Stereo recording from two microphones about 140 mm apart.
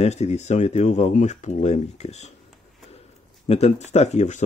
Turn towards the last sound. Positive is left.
turn(degrees=55)  # may be behind; listen again after turning